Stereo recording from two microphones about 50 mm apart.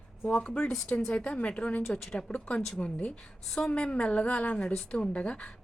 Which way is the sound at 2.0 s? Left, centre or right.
Centre.